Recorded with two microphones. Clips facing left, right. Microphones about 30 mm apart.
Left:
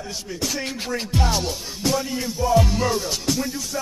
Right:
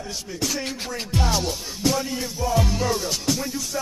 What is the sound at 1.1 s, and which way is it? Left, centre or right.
Music, centre.